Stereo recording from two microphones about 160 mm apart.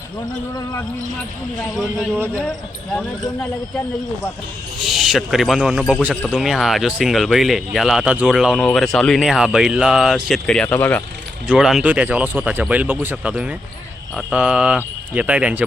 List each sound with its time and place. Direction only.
0.5 s speech: 20° left (ahead or behind)
1.7 s speech: centre (ahead or behind)
4.8 s speech: centre (ahead or behind)
11.4 s speech: 5° right (ahead or behind)